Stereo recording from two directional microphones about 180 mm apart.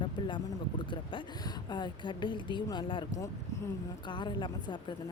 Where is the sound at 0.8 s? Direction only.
25° left (ahead or behind).